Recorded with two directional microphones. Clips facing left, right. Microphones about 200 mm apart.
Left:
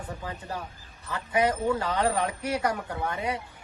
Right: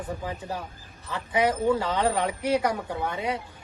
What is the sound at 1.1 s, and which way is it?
A woman's voice, 25° right (ahead or behind).